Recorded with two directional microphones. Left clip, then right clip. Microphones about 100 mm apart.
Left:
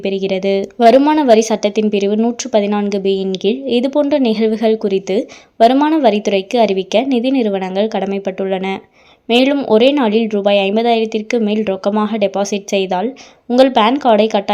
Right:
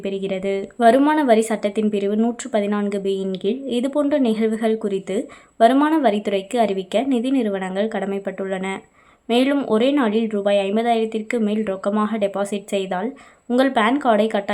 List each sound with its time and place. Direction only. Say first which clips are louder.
0.0 s speech: left 7 dB; 35° left (ahead or behind)